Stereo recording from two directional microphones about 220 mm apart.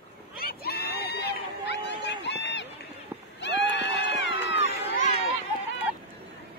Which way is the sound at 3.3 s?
55° left (ahead or behind).